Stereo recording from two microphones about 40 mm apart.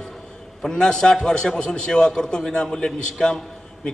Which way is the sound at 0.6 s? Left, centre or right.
Centre.